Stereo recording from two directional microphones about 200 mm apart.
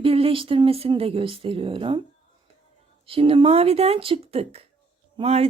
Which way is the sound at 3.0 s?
25° right (ahead or behind).